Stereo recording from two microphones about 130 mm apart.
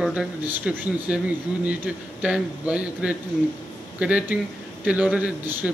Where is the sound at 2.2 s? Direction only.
10° right (ahead or behind).